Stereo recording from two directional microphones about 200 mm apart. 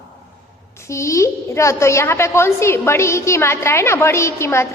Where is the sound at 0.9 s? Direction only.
15° left (ahead or behind).